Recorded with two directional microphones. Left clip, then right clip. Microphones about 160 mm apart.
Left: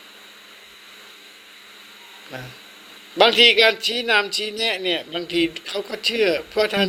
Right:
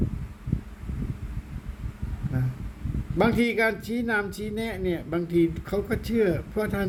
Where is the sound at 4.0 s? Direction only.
5° left (ahead or behind).